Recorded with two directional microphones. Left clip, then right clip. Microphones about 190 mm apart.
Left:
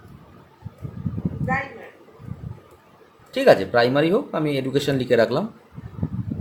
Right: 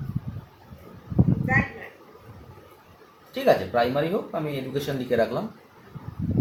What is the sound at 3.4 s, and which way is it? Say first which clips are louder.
Speech: left 5 dB; 60° left (ahead or behind).